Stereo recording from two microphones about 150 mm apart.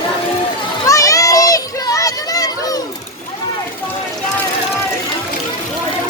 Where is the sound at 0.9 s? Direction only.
20° left (ahead or behind).